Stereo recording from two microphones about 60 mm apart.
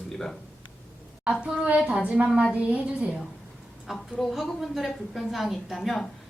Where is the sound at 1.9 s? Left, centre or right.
Right.